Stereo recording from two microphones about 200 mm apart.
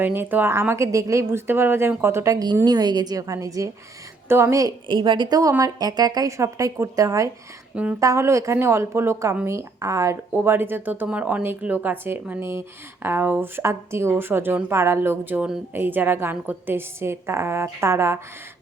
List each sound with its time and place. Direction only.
0.0 s a woman's voice: 10° right (ahead or behind)